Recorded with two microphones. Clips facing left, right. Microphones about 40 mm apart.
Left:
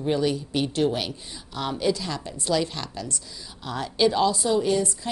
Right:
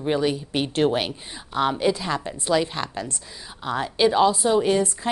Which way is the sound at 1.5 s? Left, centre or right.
Right.